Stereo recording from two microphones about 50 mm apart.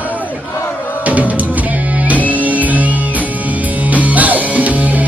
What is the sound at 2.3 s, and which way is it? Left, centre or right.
Music, right.